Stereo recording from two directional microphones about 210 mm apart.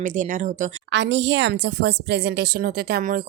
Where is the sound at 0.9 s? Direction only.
60° right (ahead or behind).